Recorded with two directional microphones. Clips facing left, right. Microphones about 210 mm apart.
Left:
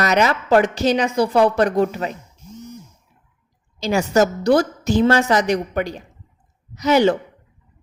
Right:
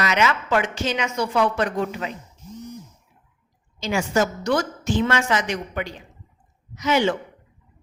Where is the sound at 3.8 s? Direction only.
40° left (ahead or behind).